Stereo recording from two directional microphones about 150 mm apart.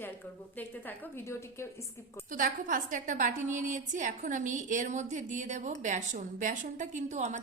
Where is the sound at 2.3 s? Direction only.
60° right (ahead or behind).